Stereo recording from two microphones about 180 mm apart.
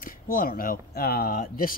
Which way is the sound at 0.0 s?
50° left (ahead or behind).